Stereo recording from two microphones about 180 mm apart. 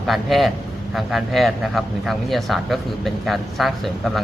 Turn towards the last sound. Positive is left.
turn(degrees=0)  # may be behind; listen again after turning